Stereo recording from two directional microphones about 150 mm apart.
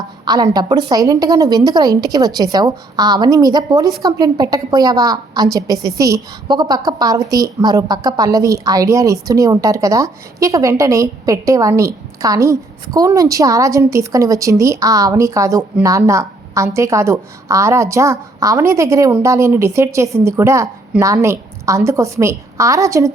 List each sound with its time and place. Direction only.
0.3 s a woman's voice: 25° right (ahead or behind)